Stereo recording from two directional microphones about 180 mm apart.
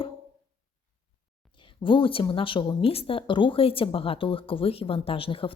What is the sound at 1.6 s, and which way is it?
A woman's voice, 25° left (ahead or behind).